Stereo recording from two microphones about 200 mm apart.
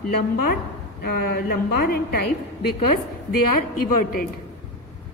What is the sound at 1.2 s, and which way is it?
Speech, 50° left (ahead or behind).